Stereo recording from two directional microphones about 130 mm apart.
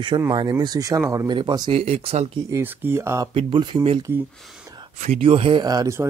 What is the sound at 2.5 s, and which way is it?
Speech, 15° right (ahead or behind).